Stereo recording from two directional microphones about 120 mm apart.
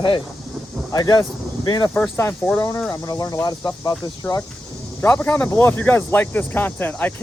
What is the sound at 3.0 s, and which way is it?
Speech, 30° left (ahead or behind).